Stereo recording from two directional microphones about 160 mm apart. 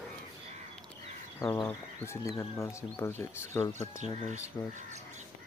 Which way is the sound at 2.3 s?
20° left (ahead or behind).